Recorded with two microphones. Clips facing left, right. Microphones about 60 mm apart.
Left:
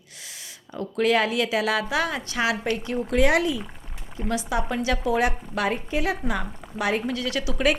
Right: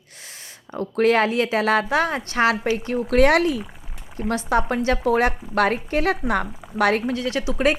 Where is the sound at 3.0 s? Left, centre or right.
Right.